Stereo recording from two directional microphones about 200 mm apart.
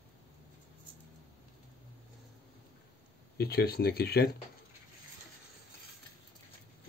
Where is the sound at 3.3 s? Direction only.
50° left (ahead or behind).